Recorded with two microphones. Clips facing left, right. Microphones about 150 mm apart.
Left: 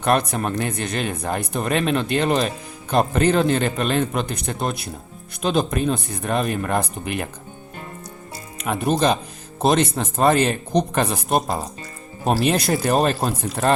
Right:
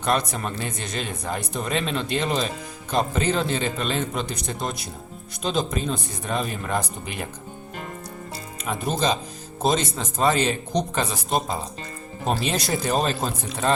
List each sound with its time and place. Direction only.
0.0 s speech: 60° left (ahead or behind)
8.6 s speech: 60° left (ahead or behind)